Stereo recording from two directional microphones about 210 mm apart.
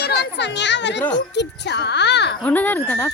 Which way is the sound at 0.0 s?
50° left (ahead or behind).